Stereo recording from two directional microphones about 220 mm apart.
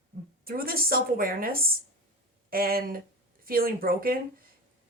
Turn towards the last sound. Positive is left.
turn(degrees=-40)  # may be behind; listen again after turning